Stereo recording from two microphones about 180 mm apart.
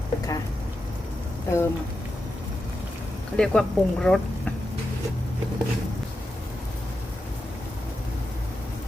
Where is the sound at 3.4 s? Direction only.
5° left (ahead or behind).